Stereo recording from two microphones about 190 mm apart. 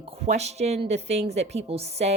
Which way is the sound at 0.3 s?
35° right (ahead or behind).